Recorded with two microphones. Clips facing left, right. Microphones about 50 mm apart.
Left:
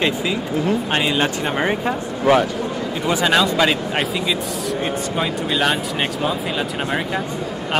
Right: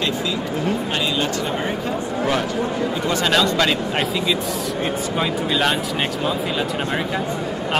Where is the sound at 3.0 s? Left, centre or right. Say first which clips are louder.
Left 3 dB; centre.